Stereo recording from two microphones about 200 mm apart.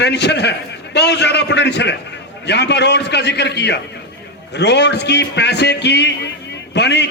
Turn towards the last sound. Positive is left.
turn(degrees=60)  # may be behind; listen again after turning